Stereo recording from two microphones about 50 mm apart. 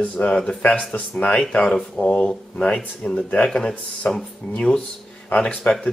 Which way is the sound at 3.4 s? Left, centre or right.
Centre.